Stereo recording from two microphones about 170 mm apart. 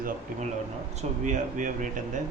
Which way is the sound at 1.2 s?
50° right (ahead or behind).